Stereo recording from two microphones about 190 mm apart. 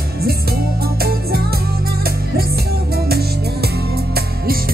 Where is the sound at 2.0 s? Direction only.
55° right (ahead or behind).